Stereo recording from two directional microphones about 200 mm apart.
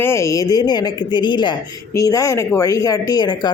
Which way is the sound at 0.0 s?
15° left (ahead or behind).